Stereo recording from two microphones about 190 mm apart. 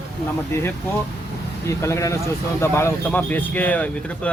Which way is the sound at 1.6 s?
15° left (ahead or behind).